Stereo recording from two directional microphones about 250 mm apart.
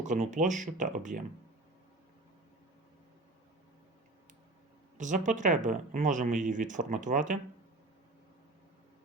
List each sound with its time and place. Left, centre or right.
0.0 s speech: right
4.9 s speech: right